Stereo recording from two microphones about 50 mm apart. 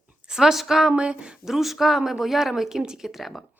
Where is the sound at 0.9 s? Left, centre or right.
Right.